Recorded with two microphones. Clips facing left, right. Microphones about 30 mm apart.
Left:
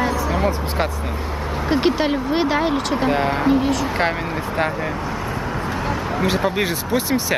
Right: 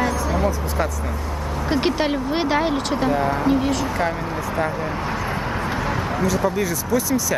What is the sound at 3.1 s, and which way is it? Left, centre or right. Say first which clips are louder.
Speech: left 1 dB; left.